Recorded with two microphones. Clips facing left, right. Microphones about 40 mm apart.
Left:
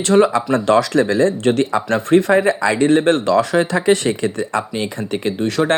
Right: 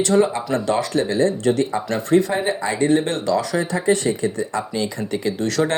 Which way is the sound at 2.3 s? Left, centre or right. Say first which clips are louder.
Left 7 dB; left.